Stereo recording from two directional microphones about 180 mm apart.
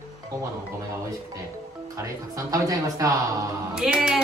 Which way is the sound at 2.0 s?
20° right (ahead or behind).